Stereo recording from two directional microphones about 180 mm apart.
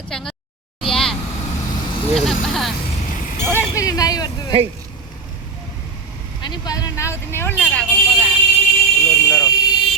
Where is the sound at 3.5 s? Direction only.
20° left (ahead or behind).